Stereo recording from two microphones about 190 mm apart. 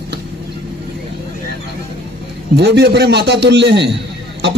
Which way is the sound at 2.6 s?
60° right (ahead or behind).